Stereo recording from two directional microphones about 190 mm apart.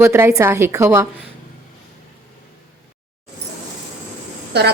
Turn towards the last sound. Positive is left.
turn(degrees=-60)  # may be behind; listen again after turning